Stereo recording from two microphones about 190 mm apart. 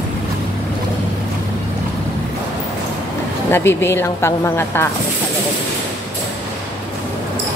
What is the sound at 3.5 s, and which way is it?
A woman's voice, 10° left (ahead or behind).